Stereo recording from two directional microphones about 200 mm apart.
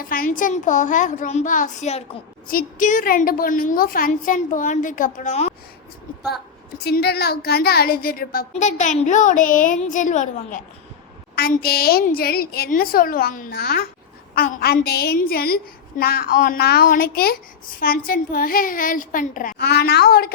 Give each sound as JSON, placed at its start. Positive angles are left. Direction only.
{"t": 0.1, "sound": "a woman's voice", "side_deg": 45}
{"t": 6.7, "sound": "a woman's voice", "side_deg": 55}